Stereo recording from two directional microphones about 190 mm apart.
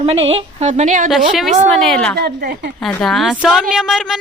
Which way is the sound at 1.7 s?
Centre (ahead or behind).